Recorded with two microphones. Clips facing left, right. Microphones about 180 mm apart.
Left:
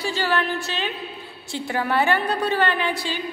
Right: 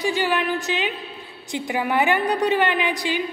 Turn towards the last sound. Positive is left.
turn(degrees=-15)  # may be behind; listen again after turning